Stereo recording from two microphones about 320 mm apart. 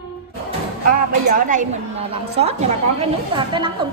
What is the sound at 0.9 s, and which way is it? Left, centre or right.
A woman's voice, right.